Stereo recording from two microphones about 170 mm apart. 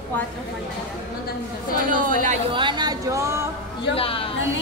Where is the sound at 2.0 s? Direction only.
50° right (ahead or behind).